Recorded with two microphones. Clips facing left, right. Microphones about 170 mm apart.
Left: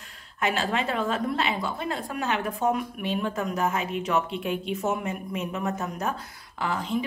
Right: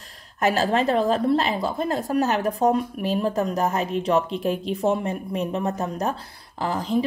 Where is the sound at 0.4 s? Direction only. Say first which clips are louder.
Right 6 dB; 40° right (ahead or behind).